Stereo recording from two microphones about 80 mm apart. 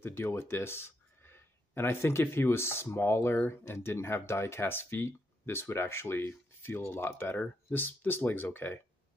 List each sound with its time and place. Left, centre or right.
0.0 s speech: left